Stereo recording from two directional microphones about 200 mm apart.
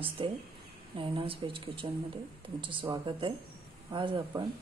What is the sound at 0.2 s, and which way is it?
Speech, 25° right (ahead or behind).